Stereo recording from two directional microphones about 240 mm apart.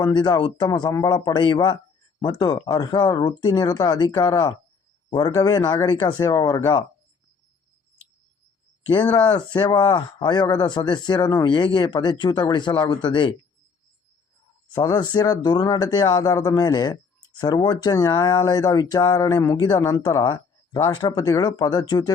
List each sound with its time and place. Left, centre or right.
0.0 s speech: centre
9.0 s speech: centre
9.5 s speech: centre
14.7 s speech: centre